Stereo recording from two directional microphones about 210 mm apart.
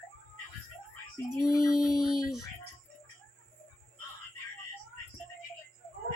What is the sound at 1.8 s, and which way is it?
Speech, centre (ahead or behind).